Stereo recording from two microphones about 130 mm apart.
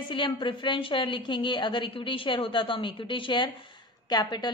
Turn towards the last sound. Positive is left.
turn(degrees=35)  # may be behind; listen again after turning